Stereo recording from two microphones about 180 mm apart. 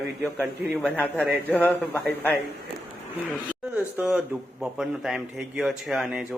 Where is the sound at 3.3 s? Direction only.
10° right (ahead or behind).